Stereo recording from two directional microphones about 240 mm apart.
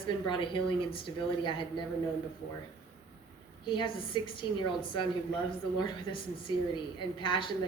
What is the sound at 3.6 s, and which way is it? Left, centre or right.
Speech, centre.